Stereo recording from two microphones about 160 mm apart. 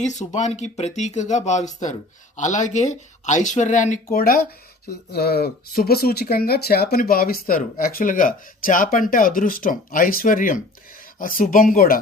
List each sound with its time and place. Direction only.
0.0 s speech: 45° left (ahead or behind); by 4.4 s 65° left (ahead or behind)
5.1 s speech: 80° left; by 11.9 s 60° left (ahead or behind)